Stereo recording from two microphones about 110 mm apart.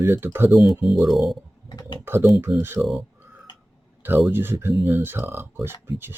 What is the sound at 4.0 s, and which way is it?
Speech, 20° right (ahead or behind).